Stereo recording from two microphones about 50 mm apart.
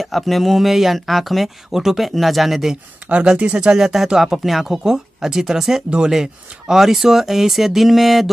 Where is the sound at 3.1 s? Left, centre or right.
Right.